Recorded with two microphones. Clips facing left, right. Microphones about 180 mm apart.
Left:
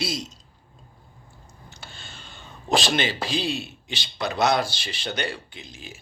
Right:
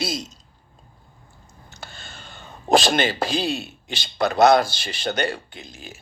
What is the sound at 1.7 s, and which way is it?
Speech, 45° right (ahead or behind).